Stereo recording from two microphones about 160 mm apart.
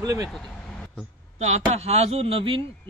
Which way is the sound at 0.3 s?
5° left (ahead or behind).